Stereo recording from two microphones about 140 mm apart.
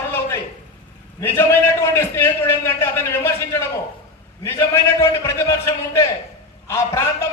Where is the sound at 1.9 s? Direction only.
20° left (ahead or behind).